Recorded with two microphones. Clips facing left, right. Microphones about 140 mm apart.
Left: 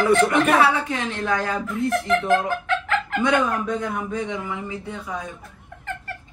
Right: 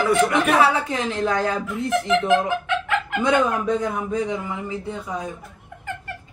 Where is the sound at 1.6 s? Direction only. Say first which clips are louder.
Even; centre (ahead or behind).